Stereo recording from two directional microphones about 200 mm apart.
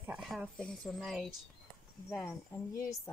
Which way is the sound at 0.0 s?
5° right (ahead or behind).